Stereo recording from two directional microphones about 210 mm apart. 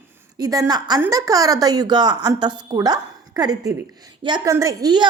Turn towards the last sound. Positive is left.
turn(degrees=-20)  # may be behind; listen again after turning